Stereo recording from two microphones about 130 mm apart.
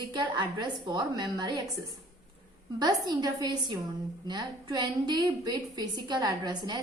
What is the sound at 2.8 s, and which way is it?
A woman's voice, 30° right (ahead or behind).